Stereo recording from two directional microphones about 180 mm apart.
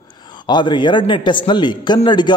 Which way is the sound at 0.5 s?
25° left (ahead or behind).